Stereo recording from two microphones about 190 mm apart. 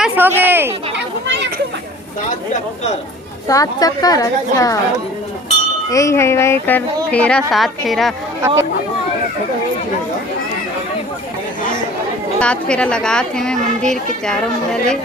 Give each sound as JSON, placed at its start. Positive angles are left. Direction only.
{"t": 0.2, "sound": "speech", "side_deg": -10}
{"t": 0.9, "sound": "children playing", "side_deg": -65}
{"t": 3.4, "sound": "a woman's voice", "side_deg": 20}
{"t": 5.9, "sound": "a woman's voice", "side_deg": 15}
{"t": 8.4, "sound": "speech", "side_deg": -15}
{"t": 12.4, "sound": "speech", "side_deg": 5}